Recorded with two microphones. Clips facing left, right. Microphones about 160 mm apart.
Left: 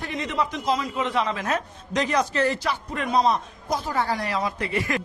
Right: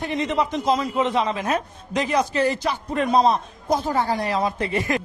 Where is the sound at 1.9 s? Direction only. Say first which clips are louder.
Right 2 dB; 10° right (ahead or behind).